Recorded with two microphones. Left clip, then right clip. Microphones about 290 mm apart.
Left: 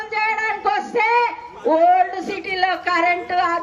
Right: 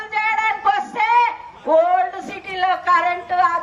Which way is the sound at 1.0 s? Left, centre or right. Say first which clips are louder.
Right 1 dB; right.